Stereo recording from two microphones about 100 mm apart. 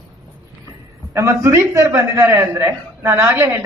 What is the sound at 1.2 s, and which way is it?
A man's voice, 30° right (ahead or behind).